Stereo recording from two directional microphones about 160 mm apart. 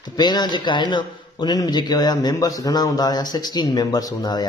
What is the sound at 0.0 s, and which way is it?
A man's voice, 25° left (ahead or behind).